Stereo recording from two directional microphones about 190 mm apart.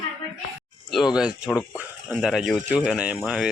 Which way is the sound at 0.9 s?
Centre (ahead or behind).